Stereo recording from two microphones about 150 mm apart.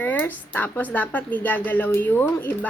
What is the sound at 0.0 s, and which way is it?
Speech, 10° left (ahead or behind).